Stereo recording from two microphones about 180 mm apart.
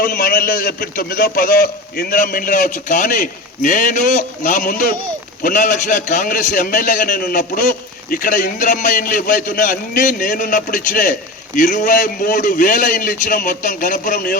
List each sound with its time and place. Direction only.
0.0 s a man's voice: 55° left (ahead or behind)